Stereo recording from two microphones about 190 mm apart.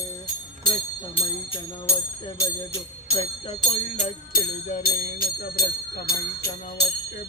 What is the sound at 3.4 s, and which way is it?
Speech, 35° left (ahead or behind).